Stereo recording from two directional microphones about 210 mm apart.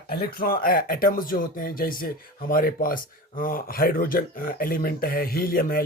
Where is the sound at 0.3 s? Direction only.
45° left (ahead or behind).